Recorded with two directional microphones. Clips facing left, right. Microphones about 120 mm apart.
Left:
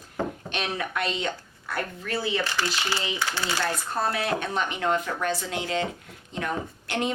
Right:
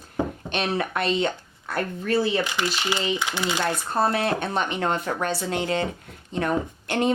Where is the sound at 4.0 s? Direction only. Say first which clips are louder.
Right 5 dB; 55° right (ahead or behind).